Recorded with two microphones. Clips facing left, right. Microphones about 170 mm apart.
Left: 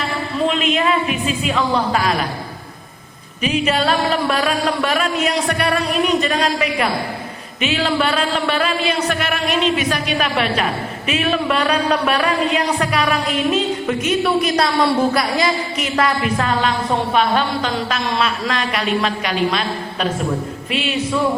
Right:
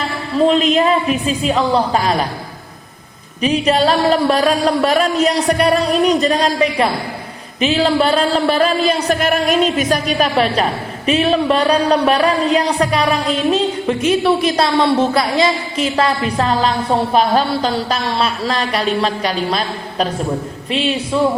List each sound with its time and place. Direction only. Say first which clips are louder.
0.4 s speech: right 5 dB; 35° right (ahead or behind)
3.4 s speech: right 4 dB; 35° right (ahead or behind)
14.6 s speech: right 2 dB; 25° right (ahead or behind)